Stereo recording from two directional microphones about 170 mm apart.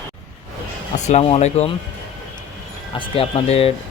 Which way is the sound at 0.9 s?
40° left (ahead or behind).